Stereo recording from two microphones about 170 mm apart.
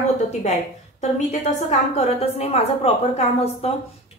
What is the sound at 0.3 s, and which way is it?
A woman's voice, 45° left (ahead or behind).